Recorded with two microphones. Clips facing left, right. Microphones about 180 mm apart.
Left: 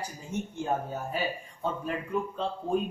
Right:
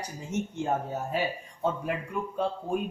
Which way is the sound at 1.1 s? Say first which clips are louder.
Right 2 dB; 15° right (ahead or behind).